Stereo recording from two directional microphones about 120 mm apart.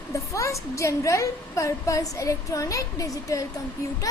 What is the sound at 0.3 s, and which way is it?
A woman's voice, 25° left (ahead or behind).